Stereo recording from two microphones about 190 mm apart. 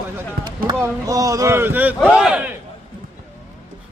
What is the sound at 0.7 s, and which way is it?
Speech, 20° right (ahead or behind).